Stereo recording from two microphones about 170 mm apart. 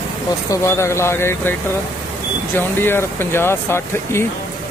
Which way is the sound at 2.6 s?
15° left (ahead or behind).